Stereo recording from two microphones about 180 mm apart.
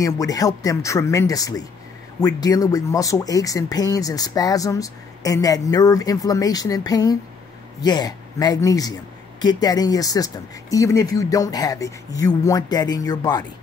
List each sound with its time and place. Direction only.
0.0 s speech: 20° left (ahead or behind)